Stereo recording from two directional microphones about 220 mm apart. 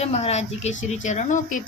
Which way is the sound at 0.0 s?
30° left (ahead or behind).